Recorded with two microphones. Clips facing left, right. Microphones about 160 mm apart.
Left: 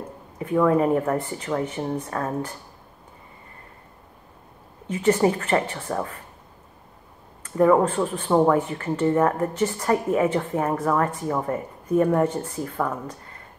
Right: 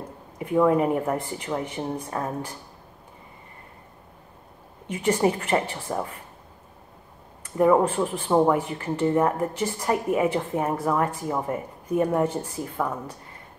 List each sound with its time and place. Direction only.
0.4 s a woman's voice: 20° right (ahead or behind)
5.0 s a woman's voice: 15° right (ahead or behind)
7.5 s a woman's voice: 15° right (ahead or behind)